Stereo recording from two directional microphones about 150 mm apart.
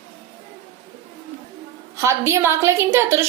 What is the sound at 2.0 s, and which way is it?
A woman's voice, 20° right (ahead or behind).